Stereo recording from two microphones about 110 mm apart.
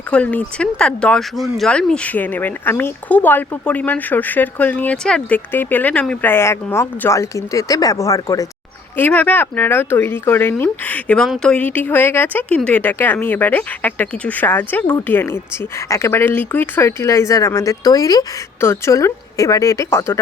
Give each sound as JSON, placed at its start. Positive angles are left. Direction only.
{"t": 0.1, "sound": "speech", "side_deg": 15}
{"t": 9.0, "sound": "speech", "side_deg": 15}